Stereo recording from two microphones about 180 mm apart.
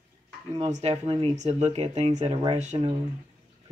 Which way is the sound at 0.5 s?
35° right (ahead or behind).